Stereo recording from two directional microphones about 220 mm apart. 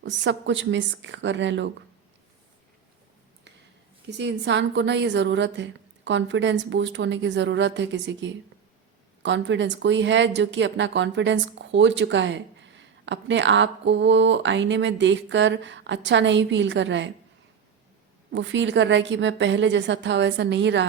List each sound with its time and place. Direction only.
0.0 s speech: 55° right (ahead or behind)
4.2 s speech: 55° right (ahead or behind)
18.3 s speech: 55° right (ahead or behind)